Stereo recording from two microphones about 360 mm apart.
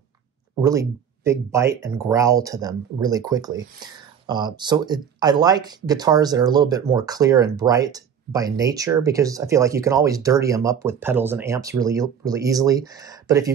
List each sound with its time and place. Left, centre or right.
0.6 s speech: centre